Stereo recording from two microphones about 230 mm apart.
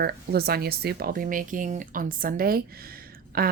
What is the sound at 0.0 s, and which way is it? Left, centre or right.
A woman's voice, right.